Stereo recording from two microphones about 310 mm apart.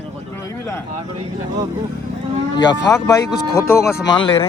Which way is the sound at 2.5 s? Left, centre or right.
Centre.